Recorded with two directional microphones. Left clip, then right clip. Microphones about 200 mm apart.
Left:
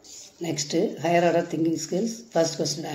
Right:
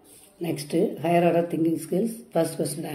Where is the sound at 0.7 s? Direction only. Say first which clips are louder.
Even; centre (ahead or behind).